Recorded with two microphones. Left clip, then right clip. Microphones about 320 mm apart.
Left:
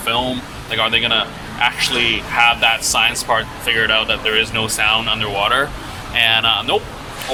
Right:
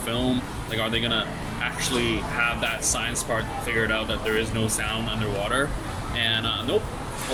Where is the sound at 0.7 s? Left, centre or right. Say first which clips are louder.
Left 10 dB; centre.